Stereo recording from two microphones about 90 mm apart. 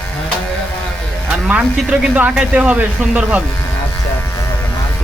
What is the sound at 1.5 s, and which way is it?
Speech, 15° right (ahead or behind).